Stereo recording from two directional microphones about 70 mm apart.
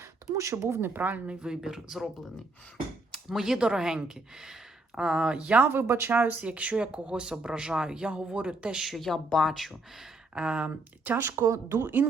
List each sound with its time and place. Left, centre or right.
0.3 s speech: right
1.3 s speech: centre
3.1 s speech: centre
5.6 s speech: right; by 10.1 s centre
10.3 s speech: centre
10.7 s speech: right
11.2 s speech: right